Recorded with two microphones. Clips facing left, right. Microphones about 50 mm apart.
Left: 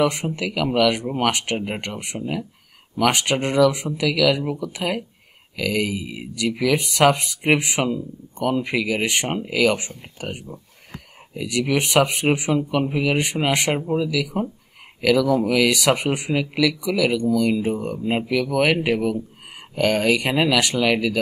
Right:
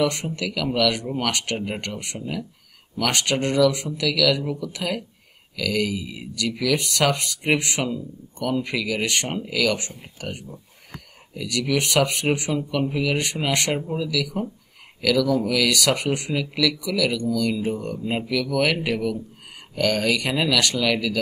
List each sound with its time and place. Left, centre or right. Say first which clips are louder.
0.0 s speech: left 2 dB; centre